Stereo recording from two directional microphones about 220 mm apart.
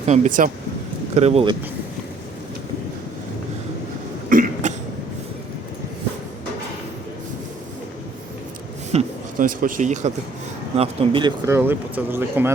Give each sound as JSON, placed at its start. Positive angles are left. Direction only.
{"t": 0.1, "sound": "speech", "side_deg": -30}
{"t": 4.3, "sound": "cough", "side_deg": -40}
{"t": 8.9, "sound": "a sound", "side_deg": -35}
{"t": 10.8, "sound": "speech", "side_deg": -20}